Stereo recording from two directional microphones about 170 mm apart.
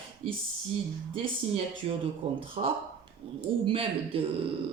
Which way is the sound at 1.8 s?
35° right (ahead or behind).